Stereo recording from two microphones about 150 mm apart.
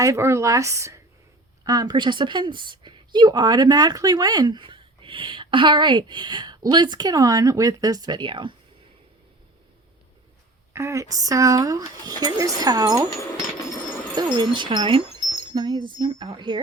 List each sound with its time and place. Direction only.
0.0 s a woman's voice: 20° right (ahead or behind)
10.8 s speech: 20° right (ahead or behind)
14.3 s speech: 30° right (ahead or behind)